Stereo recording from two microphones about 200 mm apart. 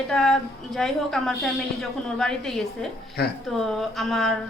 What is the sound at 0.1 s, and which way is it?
A woman's voice, centre (ahead or behind).